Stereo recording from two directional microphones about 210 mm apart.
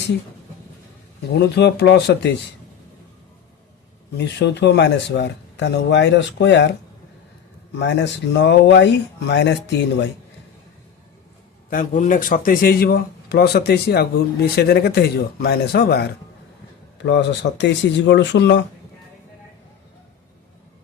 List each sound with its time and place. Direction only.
1.3 s a man's voice: 50° left (ahead or behind)
4.2 s speech: 55° left (ahead or behind)
7.8 s speech: 55° left (ahead or behind)
11.7 s a man's voice: 40° left (ahead or behind); by 18.6 s 55° left (ahead or behind)